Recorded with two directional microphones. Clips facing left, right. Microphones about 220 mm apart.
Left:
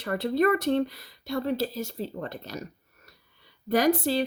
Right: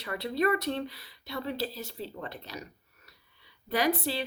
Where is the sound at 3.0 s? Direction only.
45° left (ahead or behind).